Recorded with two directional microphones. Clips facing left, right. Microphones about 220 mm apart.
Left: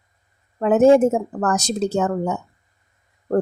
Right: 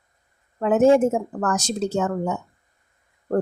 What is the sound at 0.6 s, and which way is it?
Speech, 40° left (ahead or behind).